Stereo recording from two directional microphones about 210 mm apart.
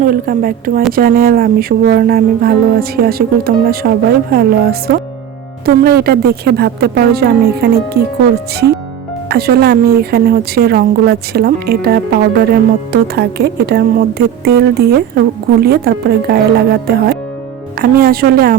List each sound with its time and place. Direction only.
0.0 s a woman's voice: 40° right (ahead or behind)
9.3 s a woman's voice: 50° right (ahead or behind)